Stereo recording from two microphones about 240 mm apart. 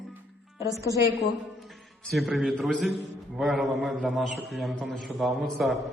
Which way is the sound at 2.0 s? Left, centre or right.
Centre.